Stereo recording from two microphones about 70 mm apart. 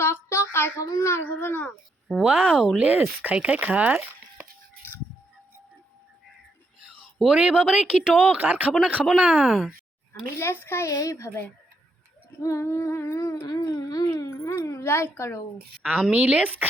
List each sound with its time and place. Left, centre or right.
0.0 s child singing: left
0.9 s speech: left
2.2 s speech: right
3.2 s a sound: centre
6.8 s speech: centre
9.3 s speech: centre
10.3 s speech: left
10.8 s a sound: left
13.5 s a sound: left
14.1 s speech: left
16.1 s speech: right